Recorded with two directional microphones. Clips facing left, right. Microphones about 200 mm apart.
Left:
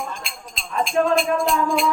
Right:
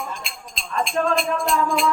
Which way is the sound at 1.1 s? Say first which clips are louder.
Left 2 dB; centre (ahead or behind).